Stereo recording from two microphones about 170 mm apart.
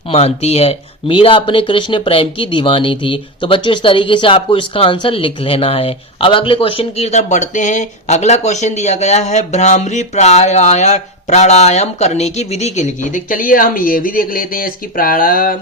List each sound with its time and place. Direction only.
0.1 s speech: 35° left (ahead or behind); by 15.5 s 55° left (ahead or behind)